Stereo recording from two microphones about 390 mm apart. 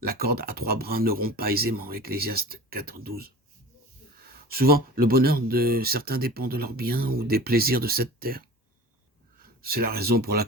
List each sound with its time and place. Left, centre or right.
0.0 s speech: right
9.6 s speech: right